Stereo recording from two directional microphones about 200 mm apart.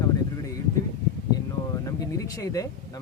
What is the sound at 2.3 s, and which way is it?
Speech, 15° left (ahead or behind).